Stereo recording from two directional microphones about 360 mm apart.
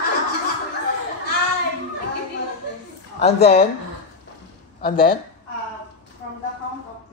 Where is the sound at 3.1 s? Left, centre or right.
Centre.